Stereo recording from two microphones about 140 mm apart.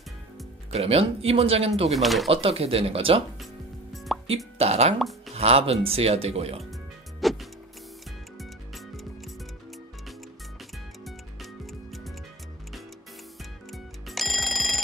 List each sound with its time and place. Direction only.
0.7 s speech: 45° right (ahead or behind)
2.0 s speech: centre (ahead or behind)
2.2 s speech: 45° right (ahead or behind)
3.9 s music: centre (ahead or behind)
4.6 s speech: 50° right (ahead or behind)
7.2 s music: centre (ahead or behind)
11.6 s music: centre (ahead or behind)
13.7 s music: centre (ahead or behind)